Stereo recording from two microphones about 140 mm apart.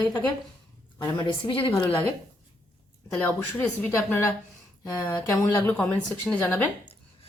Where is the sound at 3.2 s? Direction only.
10° left (ahead or behind).